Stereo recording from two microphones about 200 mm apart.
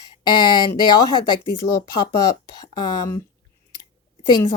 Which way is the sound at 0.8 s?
20° left (ahead or behind).